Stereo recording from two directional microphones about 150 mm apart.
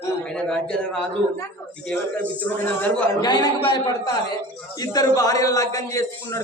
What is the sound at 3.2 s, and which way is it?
A man's voice, 25° left (ahead or behind).